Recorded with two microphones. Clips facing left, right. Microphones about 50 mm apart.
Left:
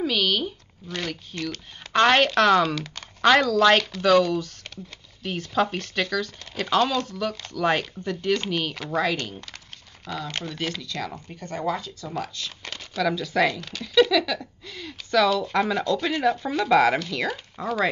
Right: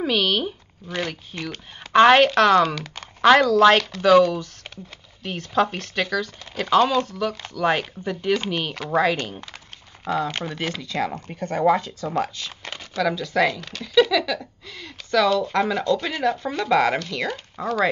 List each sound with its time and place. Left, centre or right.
0.0 s speech: centre
10.1 s speech: right
10.4 s speech: centre
11.2 s speech: right
12.4 s a sound: centre
12.9 s speech: centre